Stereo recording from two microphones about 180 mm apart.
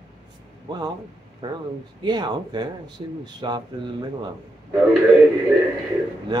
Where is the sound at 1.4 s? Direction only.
25° right (ahead or behind).